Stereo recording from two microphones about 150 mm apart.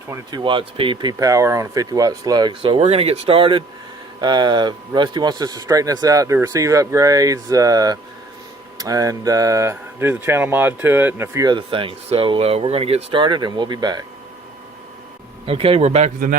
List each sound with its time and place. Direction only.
0.1 s speech: 30° right (ahead or behind)
11.4 s speech: 35° right (ahead or behind)
15.4 s speech: 40° right (ahead or behind)